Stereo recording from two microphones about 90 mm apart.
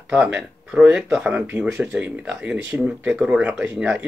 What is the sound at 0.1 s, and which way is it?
Speech, 15° right (ahead or behind).